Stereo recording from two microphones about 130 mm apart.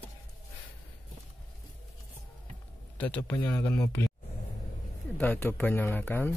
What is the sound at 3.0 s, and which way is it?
A man's voice, 15° left (ahead or behind).